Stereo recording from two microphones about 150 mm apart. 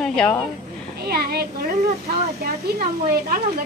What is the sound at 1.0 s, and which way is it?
Speech, 90° right.